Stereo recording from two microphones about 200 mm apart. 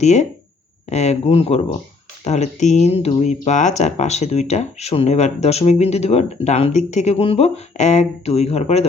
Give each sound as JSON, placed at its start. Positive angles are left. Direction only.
{"t": 0.0, "sound": "speech", "side_deg": 35}